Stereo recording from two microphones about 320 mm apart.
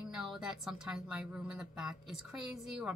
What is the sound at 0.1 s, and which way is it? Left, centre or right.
A woman's voice, centre.